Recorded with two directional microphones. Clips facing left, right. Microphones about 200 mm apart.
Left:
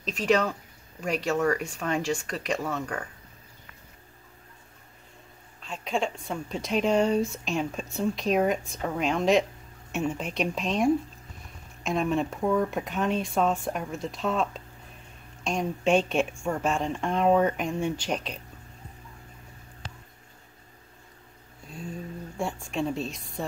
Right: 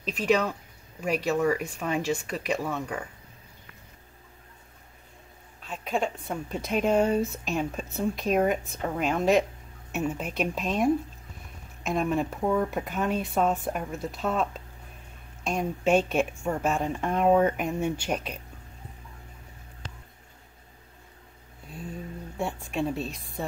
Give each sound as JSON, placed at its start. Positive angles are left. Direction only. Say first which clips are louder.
{"t": 0.0, "sound": "speech", "louder": "even", "side_deg": -5}
{"t": 5.6, "sound": "a woman's voice", "louder": "even", "side_deg": -5}
{"t": 22.4, "sound": "speech", "louder": "even", "side_deg": -5}